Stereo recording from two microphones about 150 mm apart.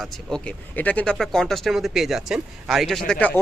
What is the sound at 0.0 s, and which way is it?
Speech, 5° left (ahead or behind).